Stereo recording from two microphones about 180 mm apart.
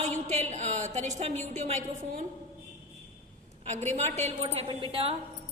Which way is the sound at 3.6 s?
40° right (ahead or behind).